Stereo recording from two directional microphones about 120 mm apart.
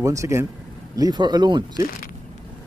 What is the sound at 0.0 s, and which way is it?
Speech, 25° right (ahead or behind).